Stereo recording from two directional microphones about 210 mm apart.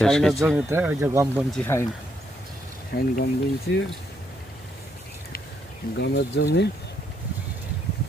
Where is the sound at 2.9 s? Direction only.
50° left (ahead or behind).